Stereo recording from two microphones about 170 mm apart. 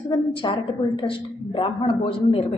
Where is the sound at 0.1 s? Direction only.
30° left (ahead or behind).